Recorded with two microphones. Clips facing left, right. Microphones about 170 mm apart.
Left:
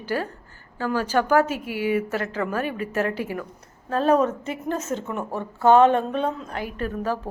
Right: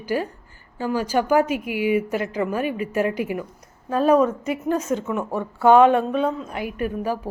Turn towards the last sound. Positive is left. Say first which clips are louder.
# right 2 dB
turn(degrees=-10)  # may be behind; listen again after turning